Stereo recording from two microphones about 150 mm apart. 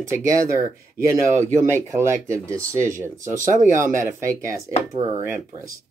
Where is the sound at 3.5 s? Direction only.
60° right (ahead or behind).